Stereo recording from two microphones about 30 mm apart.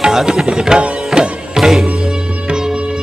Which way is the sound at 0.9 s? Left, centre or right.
Right.